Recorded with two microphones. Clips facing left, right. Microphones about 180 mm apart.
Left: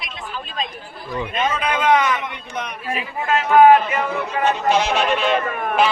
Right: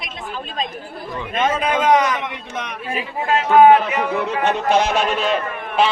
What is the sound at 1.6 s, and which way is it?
Speech, 45° right (ahead or behind).